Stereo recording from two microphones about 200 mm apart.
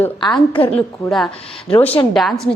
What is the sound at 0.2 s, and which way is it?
Speech, 25° left (ahead or behind).